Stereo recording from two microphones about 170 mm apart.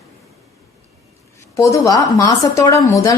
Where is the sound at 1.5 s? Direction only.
20° left (ahead or behind).